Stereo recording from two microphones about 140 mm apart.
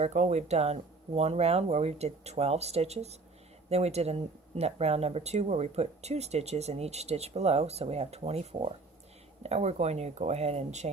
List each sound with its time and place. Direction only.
0.0 s speech: 50° right (ahead or behind)